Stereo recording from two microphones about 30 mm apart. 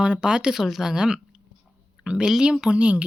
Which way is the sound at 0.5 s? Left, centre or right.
Centre.